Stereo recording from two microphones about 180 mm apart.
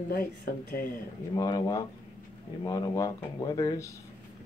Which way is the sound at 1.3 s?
20° left (ahead or behind).